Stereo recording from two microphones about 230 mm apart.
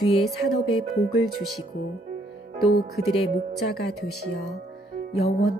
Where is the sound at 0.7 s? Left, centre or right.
Left.